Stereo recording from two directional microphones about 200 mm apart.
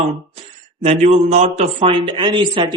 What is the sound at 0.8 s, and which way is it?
A man's voice, 35° right (ahead or behind).